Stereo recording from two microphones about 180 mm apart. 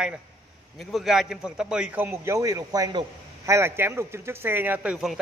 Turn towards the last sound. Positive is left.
turn(degrees=-5)  # may be behind; listen again after turning